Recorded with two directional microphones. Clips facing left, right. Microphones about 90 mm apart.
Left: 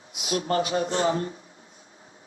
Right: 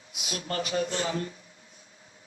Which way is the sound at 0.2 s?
35° left (ahead or behind).